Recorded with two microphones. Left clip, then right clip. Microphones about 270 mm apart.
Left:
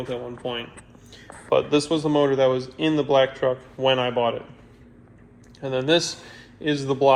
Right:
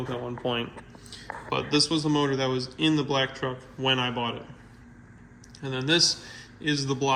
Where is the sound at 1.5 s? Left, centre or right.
Centre.